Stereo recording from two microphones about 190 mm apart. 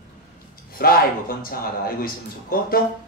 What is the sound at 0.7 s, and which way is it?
A man's voice, 50° left (ahead or behind).